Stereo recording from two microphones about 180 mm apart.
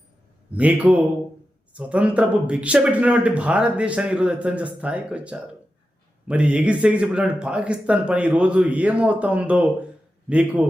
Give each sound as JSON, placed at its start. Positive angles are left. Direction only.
{"t": 0.5, "sound": "speech", "side_deg": -10}